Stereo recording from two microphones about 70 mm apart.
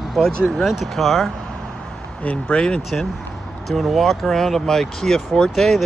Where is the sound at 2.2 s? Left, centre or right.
Centre.